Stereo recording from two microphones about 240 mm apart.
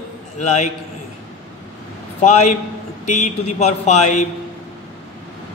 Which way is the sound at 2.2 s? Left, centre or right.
Left.